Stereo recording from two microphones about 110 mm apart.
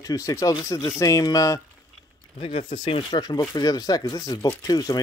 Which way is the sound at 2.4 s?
55° left (ahead or behind).